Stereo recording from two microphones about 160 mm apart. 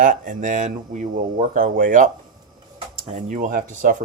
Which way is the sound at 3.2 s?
55° right (ahead or behind).